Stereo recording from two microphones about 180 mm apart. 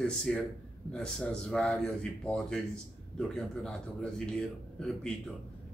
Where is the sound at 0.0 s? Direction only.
5° left (ahead or behind).